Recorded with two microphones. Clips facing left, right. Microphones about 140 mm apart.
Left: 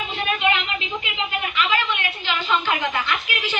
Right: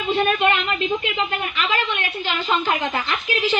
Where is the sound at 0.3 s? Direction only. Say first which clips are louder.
Right 3 dB; 45° right (ahead or behind).